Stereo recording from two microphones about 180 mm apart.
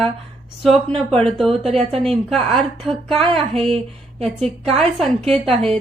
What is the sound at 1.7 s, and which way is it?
Speech, 35° right (ahead or behind).